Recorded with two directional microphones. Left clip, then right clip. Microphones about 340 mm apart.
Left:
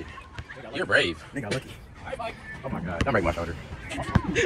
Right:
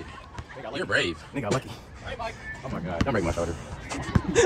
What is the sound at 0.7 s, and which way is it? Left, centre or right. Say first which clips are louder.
Speech: left 3 dB; centre.